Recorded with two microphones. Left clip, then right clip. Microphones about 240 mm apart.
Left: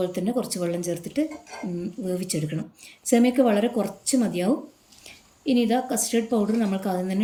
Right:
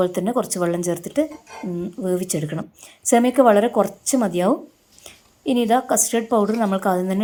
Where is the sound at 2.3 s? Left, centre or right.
Right.